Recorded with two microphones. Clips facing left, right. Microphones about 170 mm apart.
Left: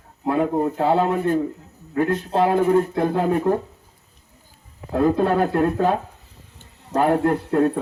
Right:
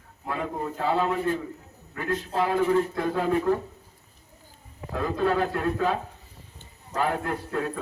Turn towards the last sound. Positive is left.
turn(degrees=40)  # may be behind; listen again after turning